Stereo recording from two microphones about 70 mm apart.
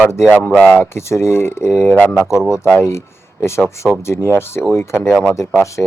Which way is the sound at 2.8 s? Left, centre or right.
Left.